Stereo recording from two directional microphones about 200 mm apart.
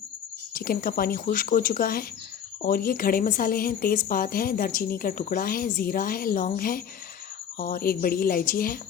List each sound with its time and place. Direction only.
0.5 s speech: 45° left (ahead or behind)